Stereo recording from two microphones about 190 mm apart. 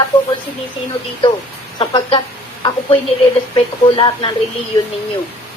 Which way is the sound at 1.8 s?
25° left (ahead or behind).